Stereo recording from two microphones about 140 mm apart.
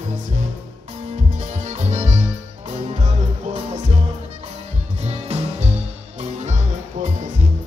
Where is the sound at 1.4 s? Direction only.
55° right (ahead or behind).